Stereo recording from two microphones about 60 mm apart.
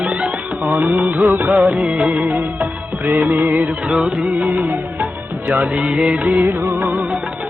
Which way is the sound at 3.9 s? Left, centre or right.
Centre.